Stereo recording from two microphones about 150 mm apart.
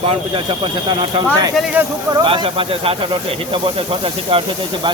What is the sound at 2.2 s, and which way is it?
Speech, 35° right (ahead or behind).